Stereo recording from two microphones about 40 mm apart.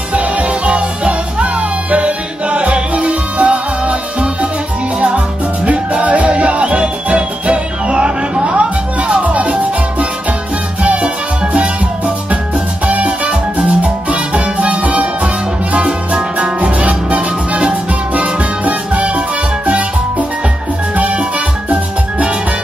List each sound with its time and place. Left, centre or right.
0.1 s music: right
5.7 s music: right
12.8 s music: right